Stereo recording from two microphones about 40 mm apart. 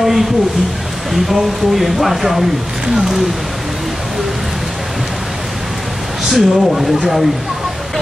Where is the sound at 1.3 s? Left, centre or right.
Centre.